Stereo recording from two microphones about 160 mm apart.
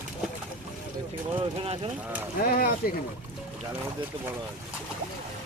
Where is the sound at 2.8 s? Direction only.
65° left (ahead or behind).